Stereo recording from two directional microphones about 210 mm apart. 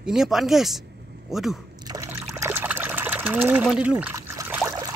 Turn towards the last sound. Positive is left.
turn(degrees=-10)  # may be behind; listen again after turning